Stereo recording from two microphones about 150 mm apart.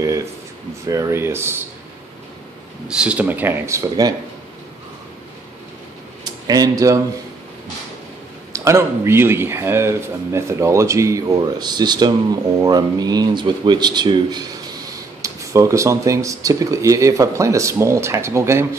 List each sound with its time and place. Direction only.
0.0 s a sound: 20° right (ahead or behind)
0.8 s speech: 20° right (ahead or behind)
2.9 s speech: 5° right (ahead or behind)
6.4 s speech: 25° right (ahead or behind)
8.5 s speech: 20° right (ahead or behind)